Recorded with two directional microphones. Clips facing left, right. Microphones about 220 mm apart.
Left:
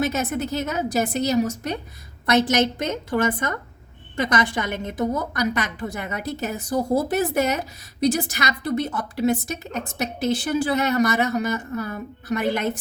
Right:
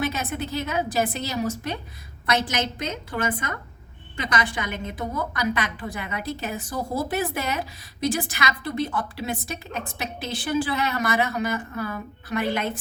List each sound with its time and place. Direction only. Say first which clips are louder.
0.0 s a woman's voice: left 4 dB; 45° left (ahead or behind)
4.3 s a woman's voice: left 2 dB; 45° left (ahead or behind)